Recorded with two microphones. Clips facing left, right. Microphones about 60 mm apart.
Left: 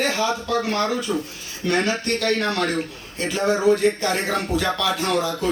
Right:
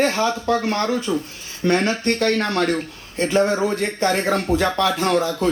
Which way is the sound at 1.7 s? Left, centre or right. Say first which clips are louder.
Right 2 dB; right.